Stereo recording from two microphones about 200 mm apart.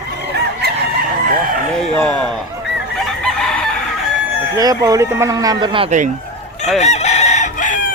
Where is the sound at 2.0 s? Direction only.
5° left (ahead or behind).